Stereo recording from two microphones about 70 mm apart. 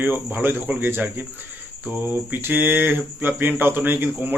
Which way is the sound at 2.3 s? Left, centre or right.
Right.